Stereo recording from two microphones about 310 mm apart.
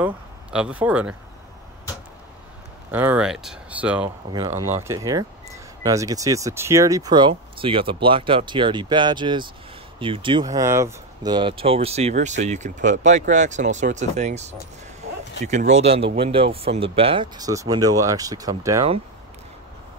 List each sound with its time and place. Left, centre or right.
0.0 s speech: centre
2.9 s speech: centre